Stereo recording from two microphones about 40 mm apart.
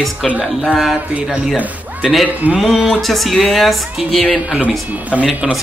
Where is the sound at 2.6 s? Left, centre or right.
Centre.